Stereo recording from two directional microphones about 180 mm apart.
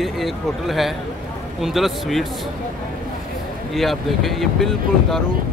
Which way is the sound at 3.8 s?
Centre (ahead or behind).